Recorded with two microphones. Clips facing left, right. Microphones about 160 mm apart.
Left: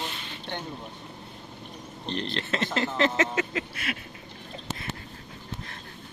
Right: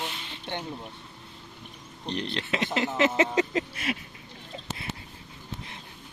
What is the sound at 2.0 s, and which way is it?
Speech, 10° right (ahead or behind).